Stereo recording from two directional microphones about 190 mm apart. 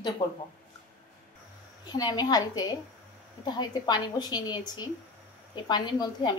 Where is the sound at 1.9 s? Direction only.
20° left (ahead or behind).